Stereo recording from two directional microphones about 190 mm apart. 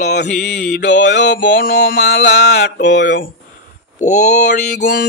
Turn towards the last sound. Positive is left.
turn(degrees=60)  # may be behind; listen again after turning